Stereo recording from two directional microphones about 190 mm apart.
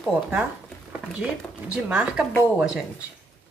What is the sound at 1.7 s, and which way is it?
Speech, 5° right (ahead or behind).